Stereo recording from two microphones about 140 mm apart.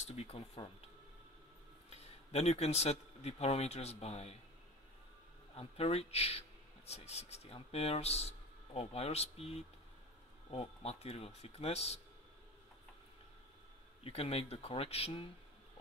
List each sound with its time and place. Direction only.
0.0 s speech: 50° left (ahead or behind)
1.9 s speech: 50° left (ahead or behind)
5.6 s speech: 45° left (ahead or behind)
14.0 s speech: 45° left (ahead or behind)